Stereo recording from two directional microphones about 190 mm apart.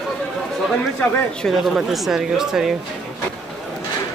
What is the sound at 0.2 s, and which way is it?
Speech, centre (ahead or behind).